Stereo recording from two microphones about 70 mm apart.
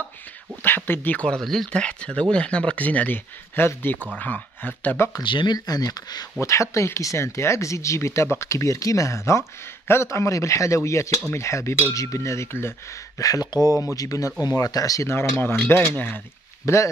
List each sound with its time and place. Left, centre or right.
0.7 s speech: left
1.1 s speech: centre
1.7 s speech: centre; by 5.1 s left
5.2 s speech: left
6.4 s speech: left
13.2 s speech: left
14.4 s speech: left
15.0 s speech: left
16.6 s speech: left